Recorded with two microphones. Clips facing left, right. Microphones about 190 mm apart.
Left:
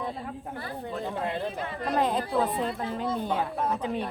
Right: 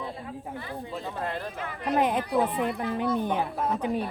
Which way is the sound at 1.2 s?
20° left (ahead or behind).